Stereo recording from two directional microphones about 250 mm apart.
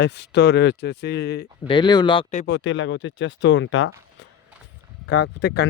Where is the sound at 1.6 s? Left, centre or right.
Centre.